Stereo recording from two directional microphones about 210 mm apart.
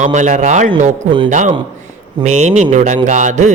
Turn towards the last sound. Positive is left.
turn(degrees=-35)  # may be behind; listen again after turning